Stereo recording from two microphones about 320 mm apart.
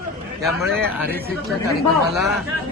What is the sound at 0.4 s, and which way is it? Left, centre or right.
A man's voice, centre.